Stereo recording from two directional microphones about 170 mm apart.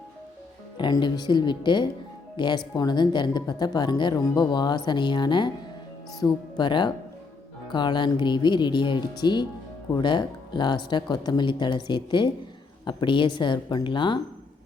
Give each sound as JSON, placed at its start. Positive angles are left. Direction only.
{"t": 0.8, "sound": "speech", "side_deg": 25}